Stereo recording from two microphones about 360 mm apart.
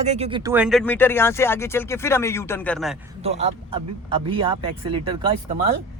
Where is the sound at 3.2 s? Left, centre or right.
Centre.